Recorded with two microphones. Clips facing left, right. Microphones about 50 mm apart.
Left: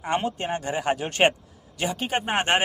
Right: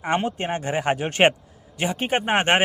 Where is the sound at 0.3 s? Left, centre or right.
Right.